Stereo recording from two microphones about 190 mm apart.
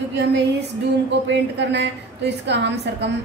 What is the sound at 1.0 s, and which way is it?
A woman's voice, 65° right (ahead or behind).